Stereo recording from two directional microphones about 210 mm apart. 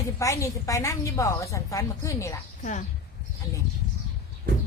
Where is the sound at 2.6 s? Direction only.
35° left (ahead or behind).